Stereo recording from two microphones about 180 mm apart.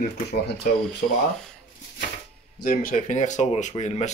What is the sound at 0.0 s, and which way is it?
Speech, 60° left (ahead or behind).